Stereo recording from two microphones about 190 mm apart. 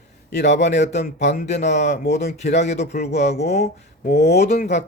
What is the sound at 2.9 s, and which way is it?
Speech, 60° left (ahead or behind).